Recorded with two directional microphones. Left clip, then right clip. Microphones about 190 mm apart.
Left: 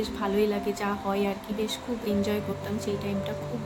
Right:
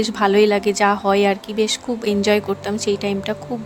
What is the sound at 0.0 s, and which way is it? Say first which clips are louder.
Speech: right 12 dB; 55° right (ahead or behind).